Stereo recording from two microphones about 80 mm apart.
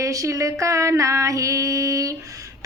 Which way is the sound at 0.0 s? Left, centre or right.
Right.